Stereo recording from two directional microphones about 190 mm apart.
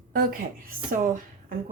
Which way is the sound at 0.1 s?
50° right (ahead or behind).